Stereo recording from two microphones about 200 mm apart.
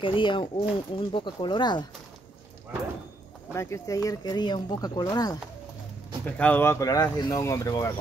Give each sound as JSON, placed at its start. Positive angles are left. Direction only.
{"t": 0.0, "sound": "speech", "side_deg": 25}
{"t": 3.5, "sound": "speech", "side_deg": 15}
{"t": 6.3, "sound": "speech", "side_deg": 10}